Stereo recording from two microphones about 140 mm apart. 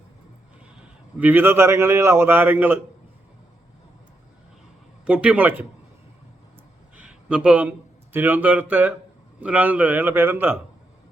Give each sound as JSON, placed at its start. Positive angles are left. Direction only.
{"t": 1.2, "sound": "a man's voice", "side_deg": -15}
{"t": 5.0, "sound": "a man's voice", "side_deg": -10}
{"t": 6.9, "sound": "a sound", "side_deg": -10}
{"t": 8.1, "sound": "a man's voice", "side_deg": -15}